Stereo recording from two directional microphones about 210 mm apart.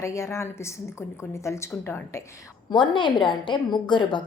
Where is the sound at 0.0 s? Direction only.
15° left (ahead or behind).